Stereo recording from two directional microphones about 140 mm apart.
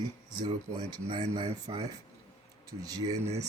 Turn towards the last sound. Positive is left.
turn(degrees=-25)  # may be behind; listen again after turning